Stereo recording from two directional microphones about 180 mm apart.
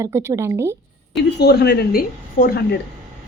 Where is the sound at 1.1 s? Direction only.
65° left (ahead or behind).